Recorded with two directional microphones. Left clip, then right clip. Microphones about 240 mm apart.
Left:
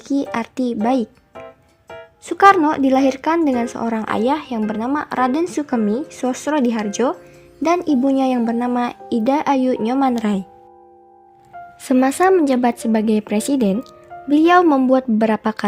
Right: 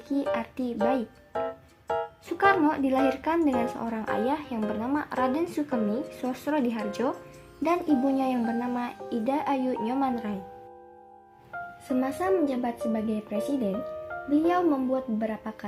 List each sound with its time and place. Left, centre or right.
0.1 s speech: left
2.2 s speech: left
11.9 s a woman's voice: left